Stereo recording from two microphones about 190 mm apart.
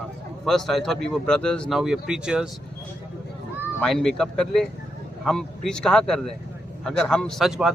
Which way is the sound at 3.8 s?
Centre (ahead or behind).